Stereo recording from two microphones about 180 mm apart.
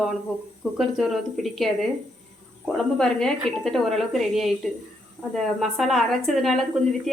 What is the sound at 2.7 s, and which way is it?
Speech, 5° left (ahead or behind).